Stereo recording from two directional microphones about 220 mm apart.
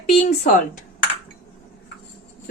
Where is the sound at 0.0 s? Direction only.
30° left (ahead or behind).